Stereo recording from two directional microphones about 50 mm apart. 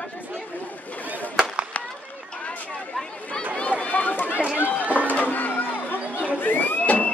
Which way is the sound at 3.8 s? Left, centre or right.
Left.